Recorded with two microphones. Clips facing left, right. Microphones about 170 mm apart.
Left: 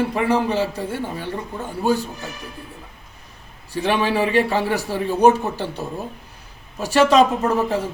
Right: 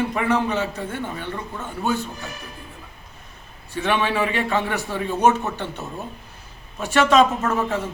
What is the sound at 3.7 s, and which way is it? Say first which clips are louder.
A man's voice: left 2 dB; 35° left (ahead or behind).